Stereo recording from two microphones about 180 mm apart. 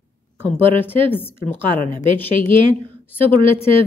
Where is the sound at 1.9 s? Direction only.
30° right (ahead or behind).